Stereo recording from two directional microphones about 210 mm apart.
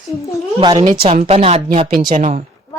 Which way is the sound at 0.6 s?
20° right (ahead or behind).